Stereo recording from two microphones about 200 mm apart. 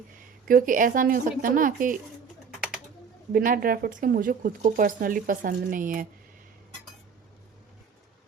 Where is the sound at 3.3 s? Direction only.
45° right (ahead or behind).